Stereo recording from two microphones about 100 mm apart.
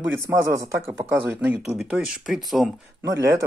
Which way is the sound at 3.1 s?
30° right (ahead or behind).